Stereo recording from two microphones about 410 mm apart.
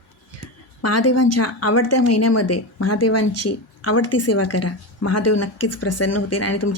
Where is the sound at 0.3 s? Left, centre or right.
Left.